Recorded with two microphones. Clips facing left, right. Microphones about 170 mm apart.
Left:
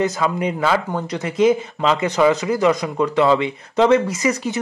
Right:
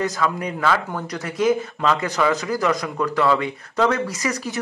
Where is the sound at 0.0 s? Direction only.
25° left (ahead or behind).